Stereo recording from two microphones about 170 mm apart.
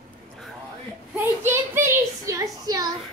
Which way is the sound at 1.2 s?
15° right (ahead or behind).